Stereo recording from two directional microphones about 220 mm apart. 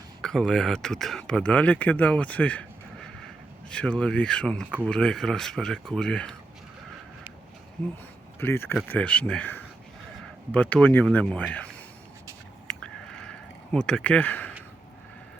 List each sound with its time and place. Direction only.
0.2 s speech: centre (ahead or behind)
8.4 s speech: 10° left (ahead or behind)
12.7 s a sound: 5° left (ahead or behind)
13.7 s speech: 5° left (ahead or behind)